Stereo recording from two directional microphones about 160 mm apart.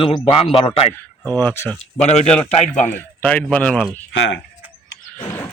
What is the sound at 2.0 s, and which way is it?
Speech, 45° left (ahead or behind).